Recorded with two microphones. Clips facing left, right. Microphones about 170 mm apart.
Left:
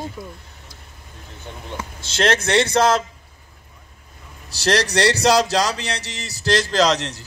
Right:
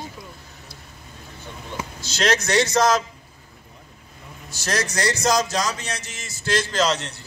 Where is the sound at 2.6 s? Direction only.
30° left (ahead or behind).